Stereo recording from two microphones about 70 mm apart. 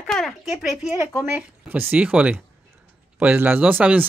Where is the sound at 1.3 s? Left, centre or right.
Right.